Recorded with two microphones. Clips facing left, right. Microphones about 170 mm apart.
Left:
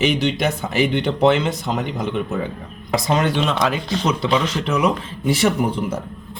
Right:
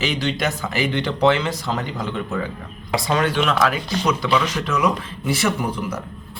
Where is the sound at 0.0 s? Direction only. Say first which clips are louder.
Left 4 dB; 20° left (ahead or behind).